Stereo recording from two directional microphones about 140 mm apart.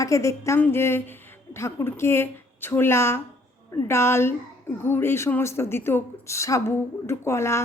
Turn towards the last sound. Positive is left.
turn(degrees=20)  # may be behind; listen again after turning